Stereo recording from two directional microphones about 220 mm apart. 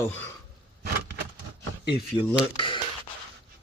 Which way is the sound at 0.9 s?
50° right (ahead or behind).